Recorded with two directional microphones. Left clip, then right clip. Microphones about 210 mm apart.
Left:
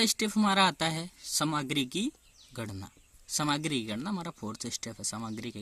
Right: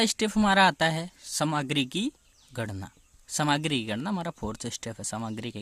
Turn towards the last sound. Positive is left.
turn(degrees=-35)  # may be behind; listen again after turning